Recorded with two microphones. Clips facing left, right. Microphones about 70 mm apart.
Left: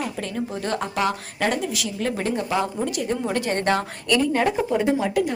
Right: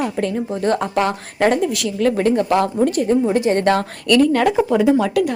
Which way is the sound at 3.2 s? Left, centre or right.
Centre.